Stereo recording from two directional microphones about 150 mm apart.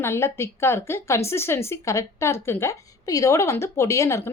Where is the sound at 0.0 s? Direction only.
15° left (ahead or behind).